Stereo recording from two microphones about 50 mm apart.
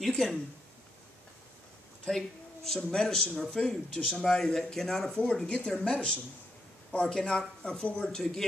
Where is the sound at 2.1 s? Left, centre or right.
Centre.